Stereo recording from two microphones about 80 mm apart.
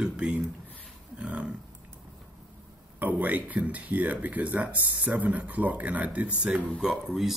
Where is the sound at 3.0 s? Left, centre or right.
Centre.